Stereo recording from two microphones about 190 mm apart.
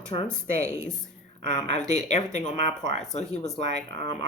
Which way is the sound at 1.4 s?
40° left (ahead or behind).